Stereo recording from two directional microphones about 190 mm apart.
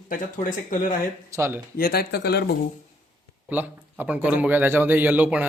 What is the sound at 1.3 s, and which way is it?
Speech, 15° right (ahead or behind).